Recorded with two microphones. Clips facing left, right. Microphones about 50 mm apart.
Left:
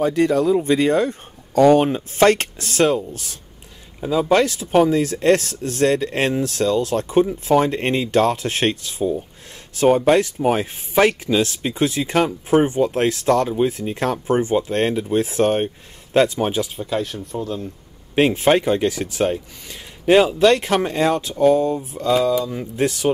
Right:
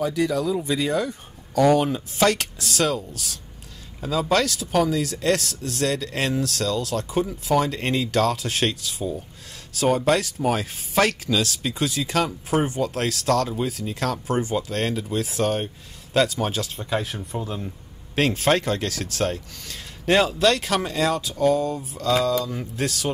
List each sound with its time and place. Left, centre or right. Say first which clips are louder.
0.0 s speech: left 6 dB; left
4.0 s speech: left 5 dB; centre
16.7 s speech: left 3 dB; centre
18.1 s speech: left 5 dB; left
22.8 s speech: left 8 dB; left